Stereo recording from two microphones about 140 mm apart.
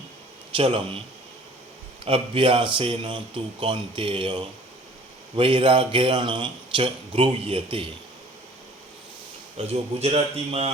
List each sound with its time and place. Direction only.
0.5 s speech: 40° right (ahead or behind)
2.0 s speech: 40° right (ahead or behind)
9.6 s a man's voice: 45° right (ahead or behind)